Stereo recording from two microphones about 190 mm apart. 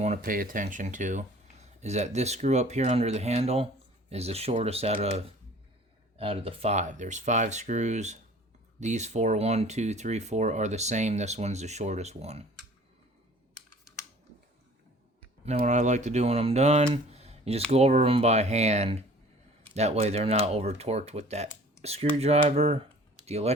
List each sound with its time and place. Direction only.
0.0 s speech: 45° right (ahead or behind)
15.4 s speech: 35° right (ahead or behind)